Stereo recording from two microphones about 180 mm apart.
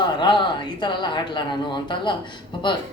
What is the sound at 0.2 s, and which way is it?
A man's voice, 25° left (ahead or behind).